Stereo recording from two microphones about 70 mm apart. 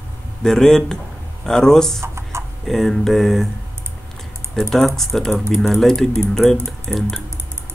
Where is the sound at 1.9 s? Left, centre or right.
Right.